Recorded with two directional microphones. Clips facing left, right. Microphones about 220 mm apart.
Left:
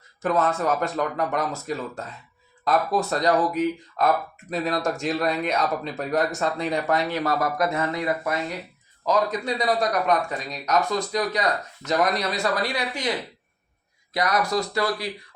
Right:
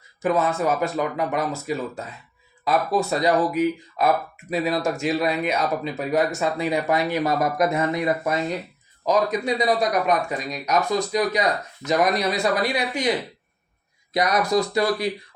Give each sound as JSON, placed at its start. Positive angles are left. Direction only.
{"t": 0.2, "sound": "speech", "side_deg": -5}